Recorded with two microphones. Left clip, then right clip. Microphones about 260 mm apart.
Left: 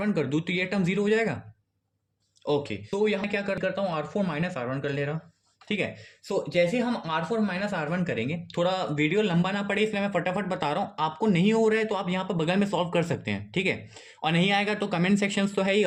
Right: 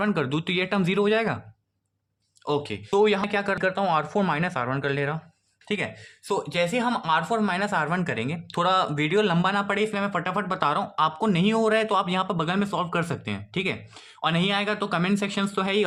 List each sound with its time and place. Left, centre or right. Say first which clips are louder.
0.0 s speech: right 2 dB; centre
2.5 s speech: right 2 dB; right; by 15.8 s centre